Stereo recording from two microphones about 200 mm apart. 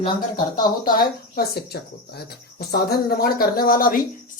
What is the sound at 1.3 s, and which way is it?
Speech, 50° left (ahead or behind).